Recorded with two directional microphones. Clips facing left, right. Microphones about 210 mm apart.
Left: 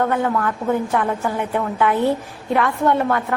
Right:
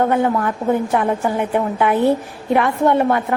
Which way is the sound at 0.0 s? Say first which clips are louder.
Right 3 dB; 20° right (ahead or behind).